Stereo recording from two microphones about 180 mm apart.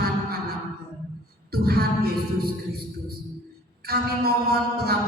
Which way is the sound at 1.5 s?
60° right (ahead or behind).